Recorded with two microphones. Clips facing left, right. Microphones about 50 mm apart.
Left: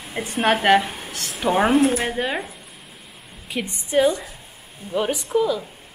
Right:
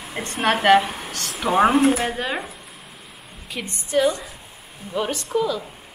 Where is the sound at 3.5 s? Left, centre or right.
Centre.